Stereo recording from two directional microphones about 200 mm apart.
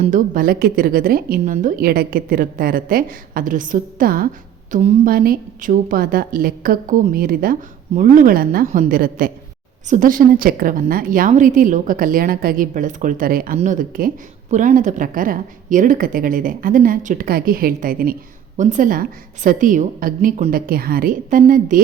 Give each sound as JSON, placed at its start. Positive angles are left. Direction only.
{"t": 0.0, "sound": "a woman's voice", "side_deg": -40}
{"t": 4.7, "sound": "a woman's voice", "side_deg": -30}
{"t": 5.0, "sound": "a woman's voice", "side_deg": -45}